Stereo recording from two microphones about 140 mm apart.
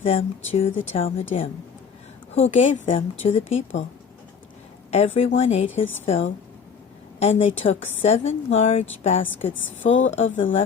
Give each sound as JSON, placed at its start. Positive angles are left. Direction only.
{"t": 0.0, "sound": "a woman's voice", "side_deg": 45}
{"t": 2.4, "sound": "a woman's voice", "side_deg": 60}
{"t": 4.9, "sound": "a woman's voice", "side_deg": 50}